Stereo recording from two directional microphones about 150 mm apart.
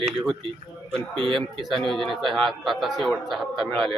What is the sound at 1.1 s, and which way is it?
Speech, 35° right (ahead or behind).